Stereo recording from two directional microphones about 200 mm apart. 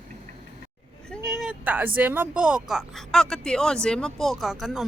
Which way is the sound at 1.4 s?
5° right (ahead or behind).